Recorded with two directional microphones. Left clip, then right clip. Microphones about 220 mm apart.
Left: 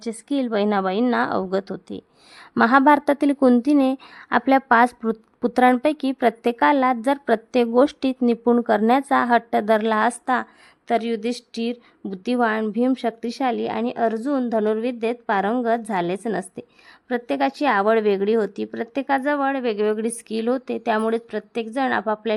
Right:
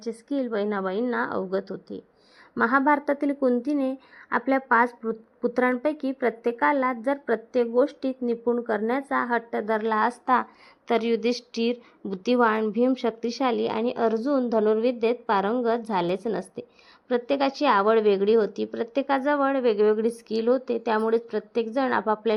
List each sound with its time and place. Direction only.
0.3 s a woman's voice: 30° left (ahead or behind)